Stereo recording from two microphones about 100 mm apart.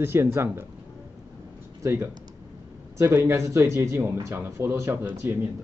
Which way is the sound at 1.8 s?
25° right (ahead or behind).